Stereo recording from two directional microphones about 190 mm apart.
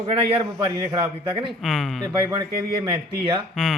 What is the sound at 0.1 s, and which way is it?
A man's voice, 30° right (ahead or behind).